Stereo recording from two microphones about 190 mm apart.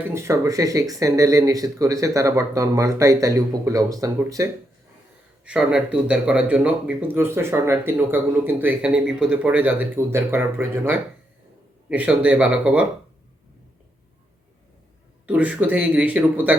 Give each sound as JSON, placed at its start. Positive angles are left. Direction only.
{"t": 0.1, "sound": "speech", "side_deg": -15}
{"t": 5.5, "sound": "speech", "side_deg": -5}
{"t": 15.3, "sound": "speech", "side_deg": -5}